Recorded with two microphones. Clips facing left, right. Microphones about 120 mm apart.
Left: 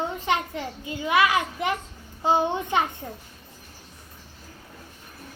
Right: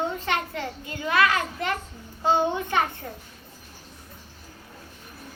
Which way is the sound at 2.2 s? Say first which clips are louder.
Even; 20° left (ahead or behind).